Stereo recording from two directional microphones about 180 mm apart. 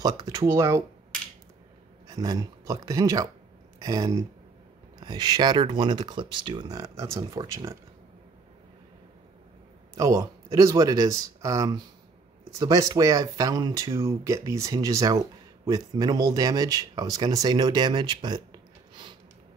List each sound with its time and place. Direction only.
0.0 s speech: 20° right (ahead or behind)
2.0 s speech: 20° right (ahead or behind)
9.9 s speech: 15° right (ahead or behind)